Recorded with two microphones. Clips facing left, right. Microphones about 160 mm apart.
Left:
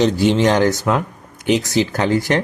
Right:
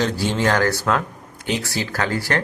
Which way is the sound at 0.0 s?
20° left (ahead or behind).